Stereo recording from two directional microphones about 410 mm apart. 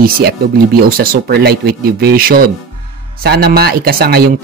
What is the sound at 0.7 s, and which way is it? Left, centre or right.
Speech, right.